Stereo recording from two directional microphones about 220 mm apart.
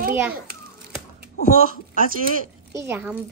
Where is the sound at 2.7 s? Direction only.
10° right (ahead or behind).